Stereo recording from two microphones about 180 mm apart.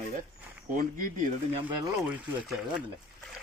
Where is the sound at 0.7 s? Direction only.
45° right (ahead or behind).